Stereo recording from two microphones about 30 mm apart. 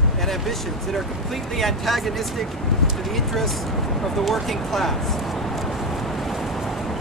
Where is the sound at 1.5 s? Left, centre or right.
Centre.